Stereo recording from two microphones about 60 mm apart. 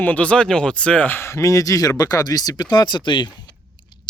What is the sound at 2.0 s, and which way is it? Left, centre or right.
Speech, left.